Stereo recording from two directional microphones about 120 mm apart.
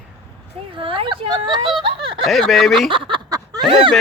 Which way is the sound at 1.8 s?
45° right (ahead or behind).